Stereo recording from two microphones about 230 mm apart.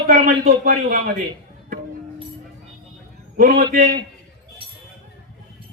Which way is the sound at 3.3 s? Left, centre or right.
Right.